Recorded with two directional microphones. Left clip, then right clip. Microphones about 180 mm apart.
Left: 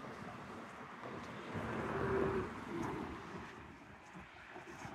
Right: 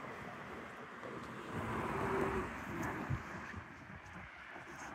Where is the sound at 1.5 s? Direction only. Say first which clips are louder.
Right 1 dB; 60° right (ahead or behind); by 2.9 s 45° right (ahead or behind).